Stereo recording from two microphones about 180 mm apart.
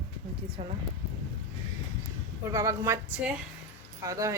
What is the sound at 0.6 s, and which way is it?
Speech, 30° right (ahead or behind).